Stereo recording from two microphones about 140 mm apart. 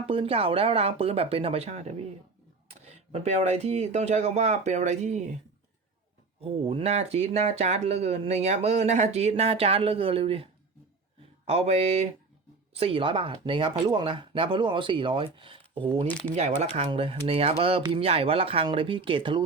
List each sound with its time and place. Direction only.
0.0 s speech: 40° right (ahead or behind); by 5.4 s 55° right (ahead or behind)
6.4 s speech: 45° right (ahead or behind)
16.4 s speech: 50° right (ahead or behind)